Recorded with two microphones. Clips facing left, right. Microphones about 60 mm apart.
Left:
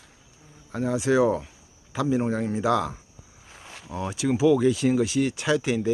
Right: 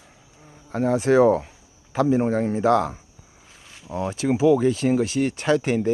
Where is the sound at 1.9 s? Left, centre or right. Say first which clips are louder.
Right 4 dB; right.